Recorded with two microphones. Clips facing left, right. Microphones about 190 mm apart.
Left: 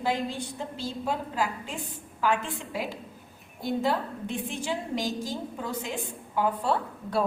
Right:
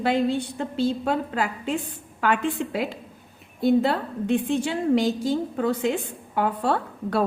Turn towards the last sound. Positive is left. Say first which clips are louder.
# right 3 dB
turn(degrees=-65)  # may be behind; listen again after turning